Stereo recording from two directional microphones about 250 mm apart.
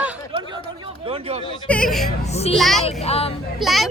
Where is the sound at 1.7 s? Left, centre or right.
Centre.